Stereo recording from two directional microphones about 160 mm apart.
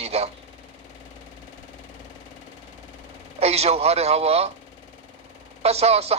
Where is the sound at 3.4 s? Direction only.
40° right (ahead or behind).